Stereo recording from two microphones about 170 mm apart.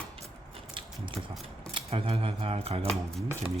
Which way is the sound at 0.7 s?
30° right (ahead or behind).